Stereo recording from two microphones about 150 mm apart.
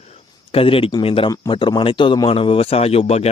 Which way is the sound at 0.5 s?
40° left (ahead or behind).